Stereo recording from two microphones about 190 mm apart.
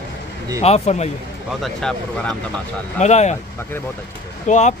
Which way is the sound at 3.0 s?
35° left (ahead or behind).